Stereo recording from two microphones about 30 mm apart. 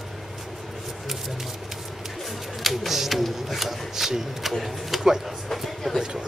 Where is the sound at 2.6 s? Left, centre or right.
Centre.